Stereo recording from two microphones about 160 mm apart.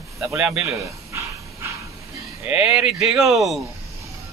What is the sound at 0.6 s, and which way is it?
Dog, 15° right (ahead or behind).